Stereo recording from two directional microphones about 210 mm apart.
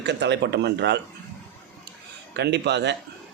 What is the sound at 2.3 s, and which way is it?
Speech, 55° right (ahead or behind).